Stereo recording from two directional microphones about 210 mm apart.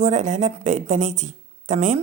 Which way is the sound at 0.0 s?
35° right (ahead or behind).